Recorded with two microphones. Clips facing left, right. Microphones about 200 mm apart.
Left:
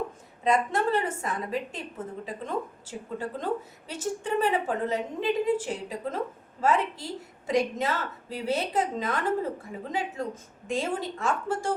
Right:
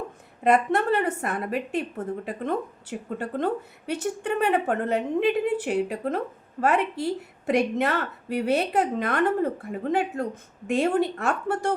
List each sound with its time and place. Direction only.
0.4 s a woman's voice: 60° right (ahead or behind)